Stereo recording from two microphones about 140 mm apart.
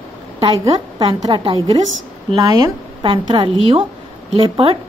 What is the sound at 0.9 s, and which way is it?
Speech, 35° right (ahead or behind).